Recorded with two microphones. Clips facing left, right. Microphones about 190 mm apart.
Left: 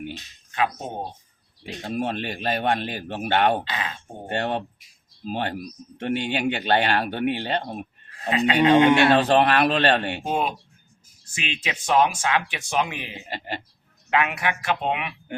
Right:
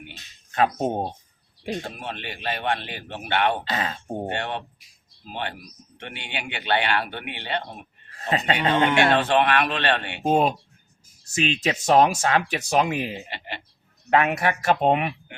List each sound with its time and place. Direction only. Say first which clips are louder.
2.0 s a man's voice: left 7 dB; 40° left (ahead or behind)
3.6 s speech: right 3 dB; 40° right (ahead or behind)
4.3 s a man's voice: left 3 dB; 40° left (ahead or behind)
8.1 s speech: left 1 dB; 40° right (ahead or behind)
8.7 s speech: left 6 dB; 15° left (ahead or behind)
9.0 s a man's voice: left 2 dB; 40° left (ahead or behind)
10.2 s speech: right 5 dB; 40° right (ahead or behind)
13.2 s speech: left 4 dB; 40° left (ahead or behind)
14.1 s speech: right 3 dB; 40° right (ahead or behind)